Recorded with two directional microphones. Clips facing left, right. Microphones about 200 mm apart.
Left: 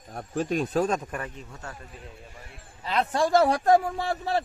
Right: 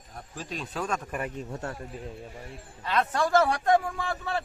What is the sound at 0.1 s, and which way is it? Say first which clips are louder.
Speech: left 11 dB; 50° left (ahead or behind).